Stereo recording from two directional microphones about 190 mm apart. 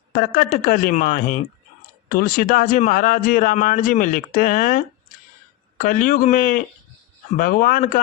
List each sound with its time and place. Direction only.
0.3 s a man's voice: 45° left (ahead or behind)